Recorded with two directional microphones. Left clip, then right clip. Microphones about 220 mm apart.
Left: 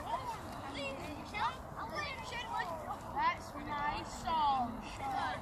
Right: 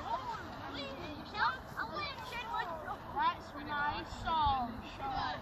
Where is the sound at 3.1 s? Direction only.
35° left (ahead or behind).